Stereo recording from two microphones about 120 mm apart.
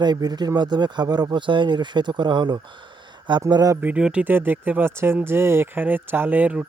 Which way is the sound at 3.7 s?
15° right (ahead or behind).